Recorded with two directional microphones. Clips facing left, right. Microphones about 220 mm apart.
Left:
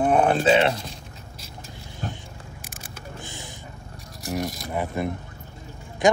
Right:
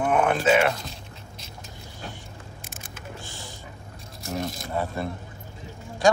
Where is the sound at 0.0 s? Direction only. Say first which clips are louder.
Left 3 dB; 35° left (ahead or behind).